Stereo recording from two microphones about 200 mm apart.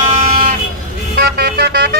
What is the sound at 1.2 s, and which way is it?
Vehicle, 50° right (ahead or behind).